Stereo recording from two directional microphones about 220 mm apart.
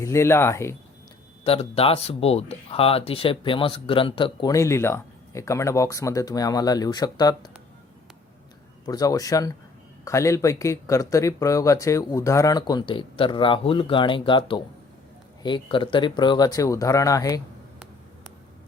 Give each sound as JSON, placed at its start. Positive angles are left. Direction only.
{"t": 0.0, "sound": "speech", "side_deg": 15}
{"t": 1.5, "sound": "speech", "side_deg": 25}
{"t": 8.9, "sound": "speech", "side_deg": 15}